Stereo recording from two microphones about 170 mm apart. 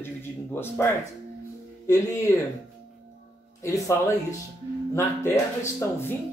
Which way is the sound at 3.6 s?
20° left (ahead or behind).